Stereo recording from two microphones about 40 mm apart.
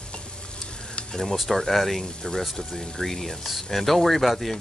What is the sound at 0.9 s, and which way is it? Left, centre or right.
Sizzle, left.